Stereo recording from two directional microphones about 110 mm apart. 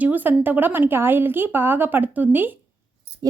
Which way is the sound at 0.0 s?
15° right (ahead or behind).